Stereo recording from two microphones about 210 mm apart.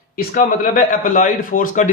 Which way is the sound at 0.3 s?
40° left (ahead or behind).